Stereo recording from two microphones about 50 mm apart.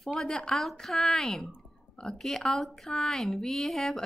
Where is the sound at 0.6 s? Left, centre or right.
Centre.